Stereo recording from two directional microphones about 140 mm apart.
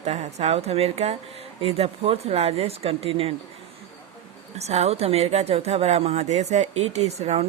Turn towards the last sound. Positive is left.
turn(degrees=-50)  # may be behind; listen again after turning